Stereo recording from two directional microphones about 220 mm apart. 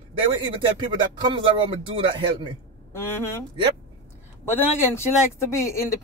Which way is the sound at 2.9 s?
10° left (ahead or behind).